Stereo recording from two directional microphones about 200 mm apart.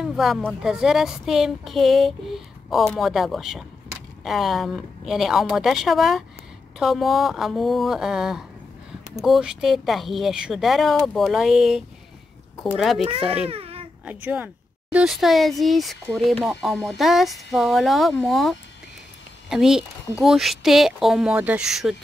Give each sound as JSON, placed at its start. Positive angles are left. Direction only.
{"t": 0.0, "sound": "speech", "side_deg": 0}
{"t": 13.5, "sound": "baby cry", "side_deg": -30}
{"t": 14.0, "sound": "speech", "side_deg": -10}